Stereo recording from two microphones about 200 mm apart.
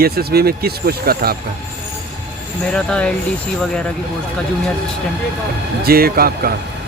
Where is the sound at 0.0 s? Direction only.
50° right (ahead or behind).